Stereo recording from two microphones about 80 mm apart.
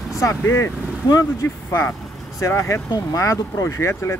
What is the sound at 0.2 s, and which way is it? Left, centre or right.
Speech, left.